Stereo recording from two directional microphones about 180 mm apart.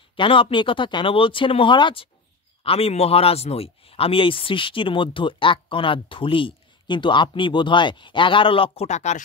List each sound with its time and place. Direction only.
0.1 s speech: 30° left (ahead or behind)